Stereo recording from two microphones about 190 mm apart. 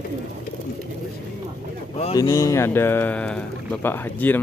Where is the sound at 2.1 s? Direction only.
15° left (ahead or behind).